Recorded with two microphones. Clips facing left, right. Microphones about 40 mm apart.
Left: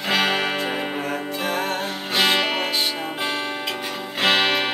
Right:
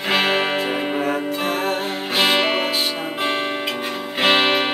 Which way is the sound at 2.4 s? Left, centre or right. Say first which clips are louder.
Right 3 dB; right.